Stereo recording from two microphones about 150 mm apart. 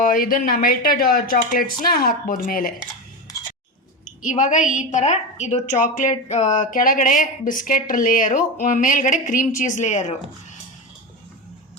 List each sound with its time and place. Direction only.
0.0 s speech: 70° left (ahead or behind)
4.2 s a woman's voice: 55° left (ahead or behind)